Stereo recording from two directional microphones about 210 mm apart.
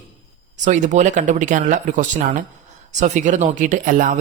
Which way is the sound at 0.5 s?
35° right (ahead or behind).